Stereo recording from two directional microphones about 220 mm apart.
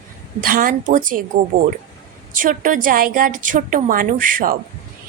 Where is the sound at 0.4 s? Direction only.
40° right (ahead or behind).